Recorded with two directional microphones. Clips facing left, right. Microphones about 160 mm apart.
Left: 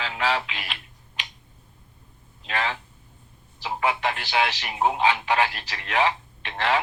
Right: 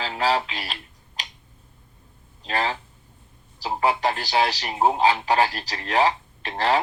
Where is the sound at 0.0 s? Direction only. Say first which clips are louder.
Right 3 dB; 35° right (ahead or behind).